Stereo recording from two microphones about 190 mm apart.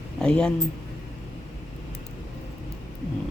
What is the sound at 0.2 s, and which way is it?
Speech, 5° left (ahead or behind).